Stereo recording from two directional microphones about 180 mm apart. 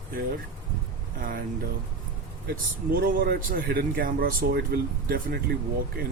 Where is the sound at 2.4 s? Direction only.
55° right (ahead or behind).